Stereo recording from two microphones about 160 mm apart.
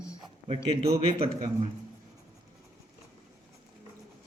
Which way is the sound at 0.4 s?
40° right (ahead or behind).